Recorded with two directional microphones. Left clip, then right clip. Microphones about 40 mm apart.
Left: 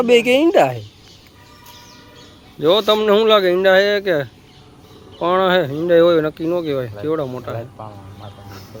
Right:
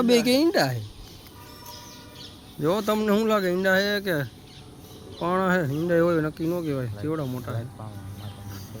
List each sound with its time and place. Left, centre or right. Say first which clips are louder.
0.0 s speech: left 8 dB; centre
2.6 s speech: left 10 dB; centre
8.4 s a sound: left 6 dB; left